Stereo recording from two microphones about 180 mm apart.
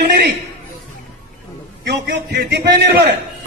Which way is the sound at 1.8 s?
65° right (ahead or behind).